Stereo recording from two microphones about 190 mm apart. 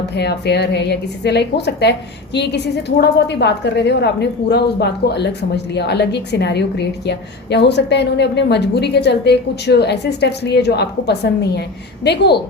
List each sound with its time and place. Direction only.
0.1 s a woman's voice: 60° left (ahead or behind)